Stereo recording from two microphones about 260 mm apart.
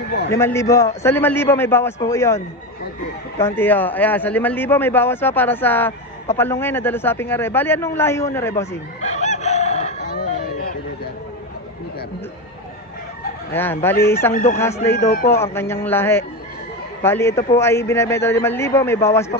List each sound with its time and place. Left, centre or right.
0.1 s a man's voice: left
0.4 s speech: centre
9.0 s chicken: left
13.5 s speech: centre
15.0 s speech: left
15.3 s speech: centre